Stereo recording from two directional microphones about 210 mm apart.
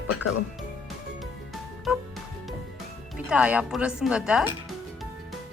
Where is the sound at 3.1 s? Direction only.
5° right (ahead or behind).